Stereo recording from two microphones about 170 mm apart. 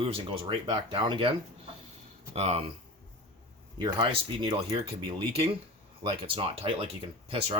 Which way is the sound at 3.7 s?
30° right (ahead or behind).